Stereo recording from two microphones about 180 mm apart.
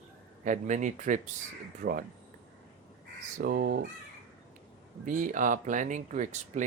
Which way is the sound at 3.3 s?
55° right (ahead or behind).